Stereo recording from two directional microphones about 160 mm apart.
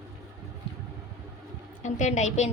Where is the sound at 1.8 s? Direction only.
45° left (ahead or behind).